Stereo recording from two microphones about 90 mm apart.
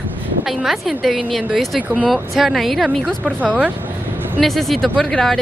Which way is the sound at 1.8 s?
15° right (ahead or behind).